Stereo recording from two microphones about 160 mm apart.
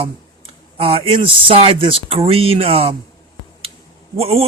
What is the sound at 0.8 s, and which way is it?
Speech, 35° right (ahead or behind).